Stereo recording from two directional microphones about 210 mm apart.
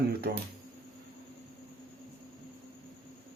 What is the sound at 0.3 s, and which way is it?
Speech, 50° right (ahead or behind).